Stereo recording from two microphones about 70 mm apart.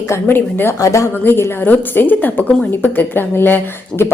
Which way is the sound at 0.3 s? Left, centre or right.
Left.